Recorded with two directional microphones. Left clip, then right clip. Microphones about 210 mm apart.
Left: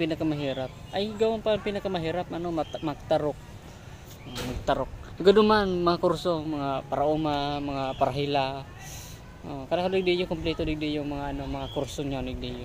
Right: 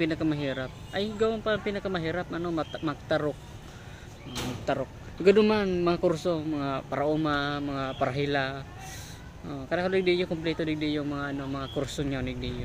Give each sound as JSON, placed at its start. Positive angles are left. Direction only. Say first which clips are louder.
{"t": 0.0, "sound": "speech", "louder": "even", "side_deg": -5}
{"t": 4.6, "sound": "a man's voice", "louder": "left 4 dB", "side_deg": 5}
{"t": 8.4, "sound": "a man's voice", "louder": "left 3 dB", "side_deg": -35}
{"t": 9.5, "sound": "speech", "louder": "left 2 dB", "side_deg": -5}
{"t": 9.9, "sound": "speech", "louder": "even", "side_deg": 50}
{"t": 11.0, "sound": "speech", "louder": "even", "side_deg": -10}
{"t": 12.1, "sound": "speech", "louder": "even", "side_deg": 45}